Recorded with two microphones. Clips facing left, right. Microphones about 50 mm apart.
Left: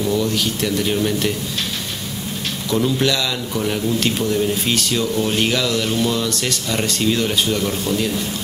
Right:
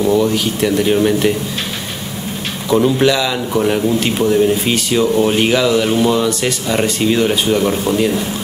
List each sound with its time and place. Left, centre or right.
0.0 s speech: centre
2.7 s a man's voice: centre